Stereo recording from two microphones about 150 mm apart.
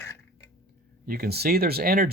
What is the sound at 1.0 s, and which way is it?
Speech, 90° right.